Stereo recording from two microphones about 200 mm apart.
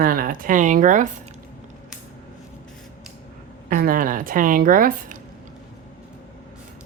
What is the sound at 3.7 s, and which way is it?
A woman's voice, 45° right (ahead or behind).